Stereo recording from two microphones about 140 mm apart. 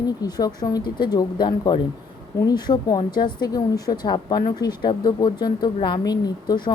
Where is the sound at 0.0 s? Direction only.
30° left (ahead or behind).